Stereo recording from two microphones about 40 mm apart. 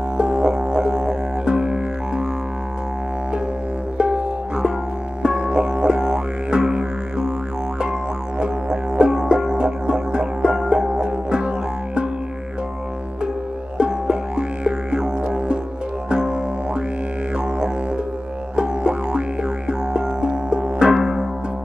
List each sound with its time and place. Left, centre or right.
0.2 s music: right
4.0 s music: right
8.4 s didgeridoo: right
13.7 s music: right
18.6 s music: right